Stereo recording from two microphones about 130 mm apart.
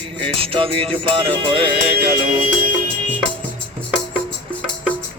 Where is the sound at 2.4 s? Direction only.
75° right (ahead or behind).